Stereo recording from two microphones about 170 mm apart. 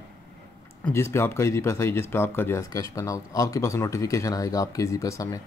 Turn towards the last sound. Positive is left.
turn(degrees=20)  # may be behind; listen again after turning